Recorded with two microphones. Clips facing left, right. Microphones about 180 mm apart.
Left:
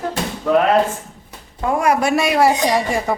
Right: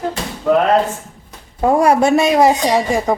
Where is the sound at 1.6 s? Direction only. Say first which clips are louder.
Right 5 dB; 35° right (ahead or behind); by 3.1 s 15° right (ahead or behind).